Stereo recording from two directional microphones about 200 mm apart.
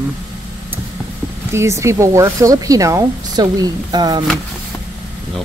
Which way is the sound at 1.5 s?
15° right (ahead or behind).